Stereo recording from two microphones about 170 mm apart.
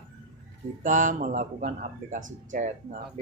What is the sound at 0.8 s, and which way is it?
Speech, 50° right (ahead or behind).